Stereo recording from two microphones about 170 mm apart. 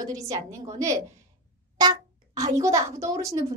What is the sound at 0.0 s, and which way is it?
A child's voice, 20° right (ahead or behind).